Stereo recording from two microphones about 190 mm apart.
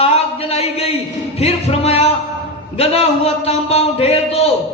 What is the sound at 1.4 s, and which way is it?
Music, 30° left (ahead or behind).